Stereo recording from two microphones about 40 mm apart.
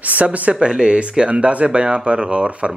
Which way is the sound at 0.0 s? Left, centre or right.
Right.